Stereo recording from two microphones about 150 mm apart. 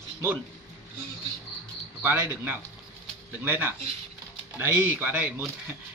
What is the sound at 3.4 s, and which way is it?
Speech, 15° right (ahead or behind).